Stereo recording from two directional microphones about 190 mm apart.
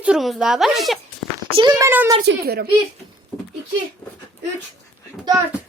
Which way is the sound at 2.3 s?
55° right (ahead or behind).